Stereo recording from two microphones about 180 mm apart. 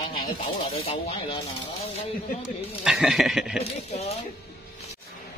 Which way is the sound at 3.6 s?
35° left (ahead or behind).